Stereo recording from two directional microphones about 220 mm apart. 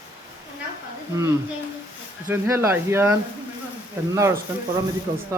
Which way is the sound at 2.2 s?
10° right (ahead or behind).